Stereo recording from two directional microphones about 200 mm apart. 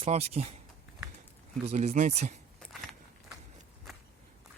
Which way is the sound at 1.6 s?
35° right (ahead or behind).